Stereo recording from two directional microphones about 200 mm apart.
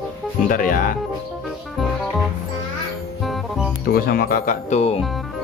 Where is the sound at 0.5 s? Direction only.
45° left (ahead or behind).